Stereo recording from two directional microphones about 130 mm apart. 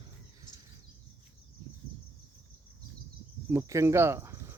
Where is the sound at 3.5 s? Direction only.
25° right (ahead or behind).